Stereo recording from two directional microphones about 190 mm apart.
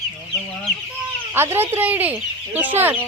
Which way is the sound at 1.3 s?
10° right (ahead or behind).